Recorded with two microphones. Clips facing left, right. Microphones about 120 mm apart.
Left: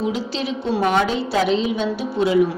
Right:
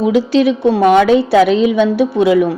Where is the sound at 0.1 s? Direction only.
65° right (ahead or behind).